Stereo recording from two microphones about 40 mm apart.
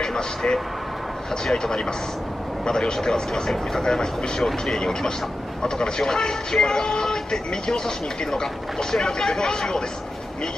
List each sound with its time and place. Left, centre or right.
0.0 s speech: centre
4.4 s speech: centre
4.7 s speech: centre